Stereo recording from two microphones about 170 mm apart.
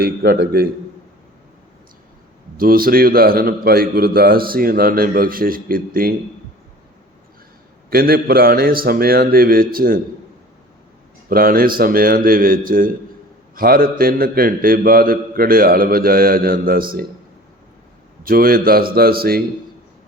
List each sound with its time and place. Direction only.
0.0 s a man's voice: 65° right (ahead or behind)
2.6 s a man's voice: 60° right (ahead or behind)
7.9 s a man's voice: 60° right (ahead or behind)
11.3 s a man's voice: 60° right (ahead or behind)
18.2 s a man's voice: 60° right (ahead or behind)